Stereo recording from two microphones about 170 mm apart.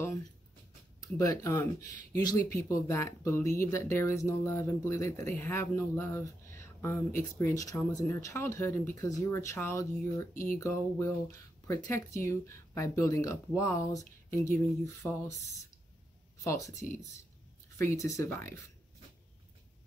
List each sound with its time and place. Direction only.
1.0 s speech: 20° left (ahead or behind)
16.8 s speech: 5° left (ahead or behind)
17.7 s speech: 15° left (ahead or behind)